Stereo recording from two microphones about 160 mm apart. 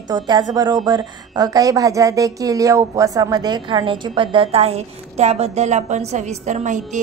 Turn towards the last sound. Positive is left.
turn(degrees=-50)  # may be behind; listen again after turning